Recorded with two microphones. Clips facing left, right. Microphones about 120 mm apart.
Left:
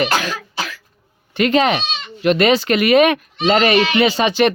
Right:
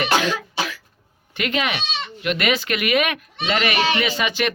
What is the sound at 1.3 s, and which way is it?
Speech, 30° left (ahead or behind).